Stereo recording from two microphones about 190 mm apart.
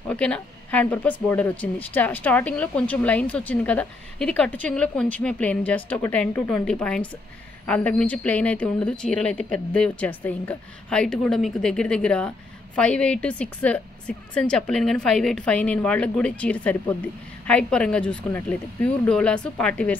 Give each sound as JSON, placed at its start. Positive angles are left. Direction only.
{"t": 0.1, "sound": "speech", "side_deg": 5}